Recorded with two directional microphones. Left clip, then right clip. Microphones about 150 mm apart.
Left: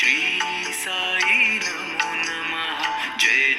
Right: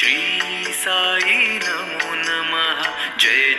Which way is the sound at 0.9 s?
60° right (ahead or behind).